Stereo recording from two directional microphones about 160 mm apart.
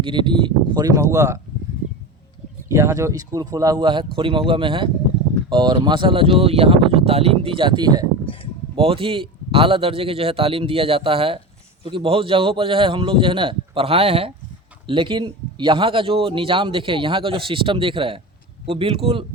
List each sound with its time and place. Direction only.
0.0 s speech: 30° right (ahead or behind)
2.6 s a man's voice: 20° right (ahead or behind); by 18.9 s 35° right (ahead or behind)